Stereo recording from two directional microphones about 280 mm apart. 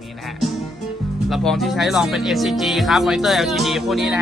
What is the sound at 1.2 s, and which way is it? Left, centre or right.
Speech, centre.